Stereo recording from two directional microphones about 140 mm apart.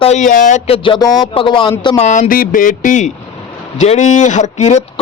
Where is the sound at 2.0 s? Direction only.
60° left (ahead or behind).